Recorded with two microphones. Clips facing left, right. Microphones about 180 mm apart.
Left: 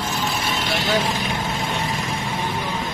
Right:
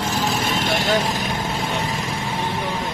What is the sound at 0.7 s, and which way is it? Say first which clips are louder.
Vehicle: right 1 dB; 45° right (ahead or behind).